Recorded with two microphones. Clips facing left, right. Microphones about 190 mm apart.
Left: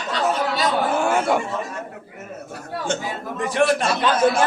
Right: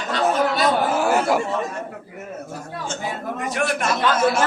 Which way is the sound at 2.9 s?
65° left (ahead or behind).